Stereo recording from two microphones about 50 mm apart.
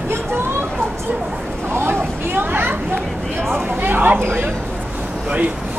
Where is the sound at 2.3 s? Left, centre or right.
Right.